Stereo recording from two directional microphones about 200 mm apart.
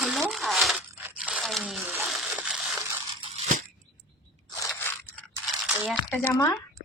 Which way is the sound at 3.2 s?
35° right (ahead or behind).